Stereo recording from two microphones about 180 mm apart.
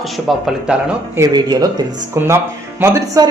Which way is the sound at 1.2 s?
20° right (ahead or behind).